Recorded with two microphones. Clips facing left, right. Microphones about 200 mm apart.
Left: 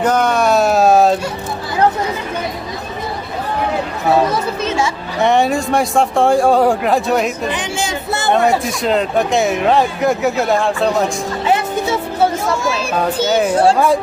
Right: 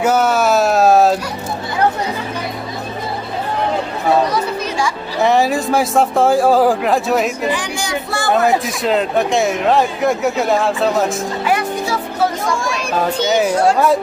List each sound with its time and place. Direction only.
0.0 s speech: 5° right (ahead or behind)
4.3 s children playing: 25° left (ahead or behind)
5.2 s speech: centre (ahead or behind)
7.5 s speech: 20° left (ahead or behind)
8.3 s speech: centre (ahead or behind)
11.4 s music: 25° left (ahead or behind)
12.4 s speech: centre (ahead or behind)